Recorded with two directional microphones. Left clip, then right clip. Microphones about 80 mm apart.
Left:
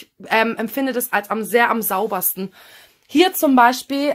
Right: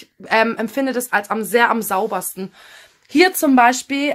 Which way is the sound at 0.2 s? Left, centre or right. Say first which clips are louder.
Right 1 dB; left.